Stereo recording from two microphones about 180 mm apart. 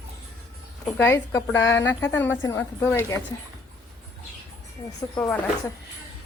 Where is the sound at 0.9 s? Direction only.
10° left (ahead or behind).